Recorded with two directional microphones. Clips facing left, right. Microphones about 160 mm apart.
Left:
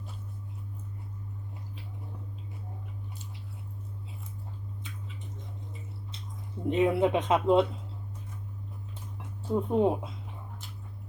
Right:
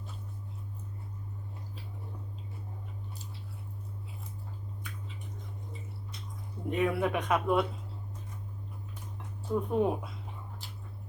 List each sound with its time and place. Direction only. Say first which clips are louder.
6.7 s speech: left 5 dB; 20° left (ahead or behind)
9.6 s speech: left 3 dB; 25° left (ahead or behind)